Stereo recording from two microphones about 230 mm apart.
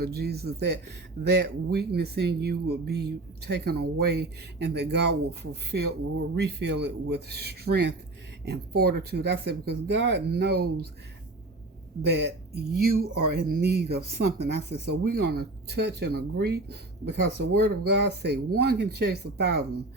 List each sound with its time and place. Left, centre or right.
0.0 s speech: right
12.0 s speech: right
14.8 s speech: right